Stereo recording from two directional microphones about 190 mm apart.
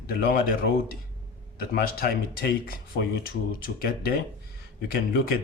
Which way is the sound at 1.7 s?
50° left (ahead or behind).